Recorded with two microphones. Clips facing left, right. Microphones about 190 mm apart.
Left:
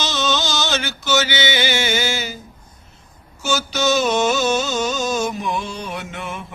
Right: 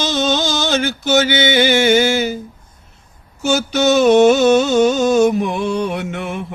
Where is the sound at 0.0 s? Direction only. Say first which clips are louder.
Right 5 dB; 50° right (ahead or behind).